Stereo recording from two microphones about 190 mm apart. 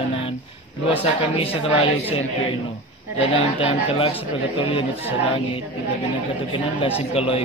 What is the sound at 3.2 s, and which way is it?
A man's voice, 25° left (ahead or behind).